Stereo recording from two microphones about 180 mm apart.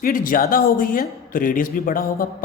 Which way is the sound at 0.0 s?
50° left (ahead or behind).